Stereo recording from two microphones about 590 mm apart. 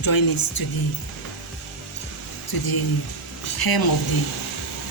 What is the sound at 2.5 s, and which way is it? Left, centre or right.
A woman's voice, left.